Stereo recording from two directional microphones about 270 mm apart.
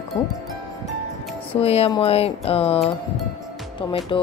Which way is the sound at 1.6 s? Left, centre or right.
Left.